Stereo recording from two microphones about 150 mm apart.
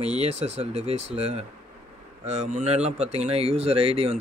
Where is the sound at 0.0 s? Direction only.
45° right (ahead or behind).